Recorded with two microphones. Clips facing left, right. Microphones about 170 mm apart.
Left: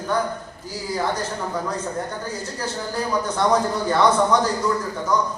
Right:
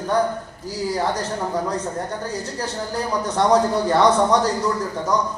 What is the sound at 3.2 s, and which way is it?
A man's voice, 35° right (ahead or behind).